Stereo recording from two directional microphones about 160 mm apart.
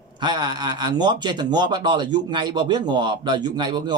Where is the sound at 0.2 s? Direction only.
30° right (ahead or behind).